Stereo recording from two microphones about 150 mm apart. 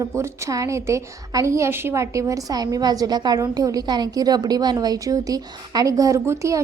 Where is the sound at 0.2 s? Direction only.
20° right (ahead or behind).